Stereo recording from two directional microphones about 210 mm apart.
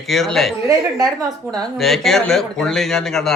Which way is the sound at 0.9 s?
15° right (ahead or behind).